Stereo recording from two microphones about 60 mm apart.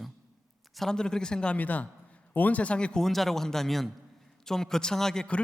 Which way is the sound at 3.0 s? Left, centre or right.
Centre.